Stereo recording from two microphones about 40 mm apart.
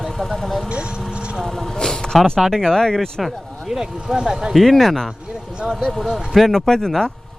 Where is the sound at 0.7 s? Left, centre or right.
Right.